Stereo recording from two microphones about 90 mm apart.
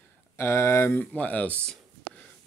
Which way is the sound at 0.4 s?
30° left (ahead or behind).